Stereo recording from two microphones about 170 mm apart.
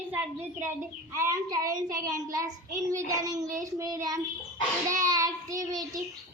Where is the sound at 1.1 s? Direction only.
20° right (ahead or behind).